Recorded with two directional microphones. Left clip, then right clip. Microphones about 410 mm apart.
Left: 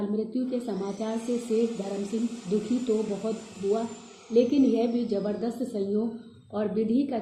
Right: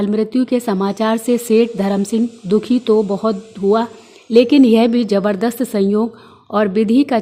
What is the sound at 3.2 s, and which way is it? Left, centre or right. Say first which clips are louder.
A woman's voice: right 13 dB; right.